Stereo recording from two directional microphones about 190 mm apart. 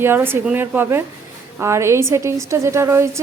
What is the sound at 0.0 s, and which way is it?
A woman's voice, 10° right (ahead or behind).